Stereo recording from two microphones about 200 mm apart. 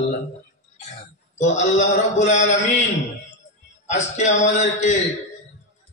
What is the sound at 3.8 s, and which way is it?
A man's voice, 35° left (ahead or behind).